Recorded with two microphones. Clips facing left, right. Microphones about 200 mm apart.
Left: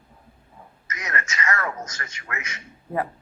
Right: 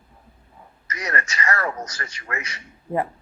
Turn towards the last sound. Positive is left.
turn(degrees=-30)  # may be behind; listen again after turning